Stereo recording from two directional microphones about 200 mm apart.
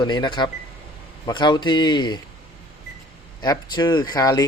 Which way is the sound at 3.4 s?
20° left (ahead or behind).